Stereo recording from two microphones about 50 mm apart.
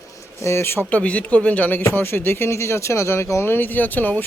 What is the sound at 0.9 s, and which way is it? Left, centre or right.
Speech, left.